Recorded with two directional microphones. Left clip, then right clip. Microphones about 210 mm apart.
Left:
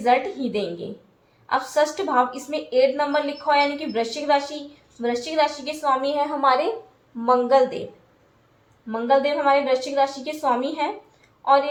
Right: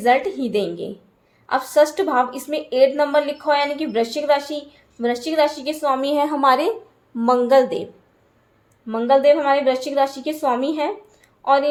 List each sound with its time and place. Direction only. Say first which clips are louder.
0.0 s a woman's voice: right 3 dB; 50° right (ahead or behind)
8.9 s a woman's voice: right 5 dB; 50° right (ahead or behind)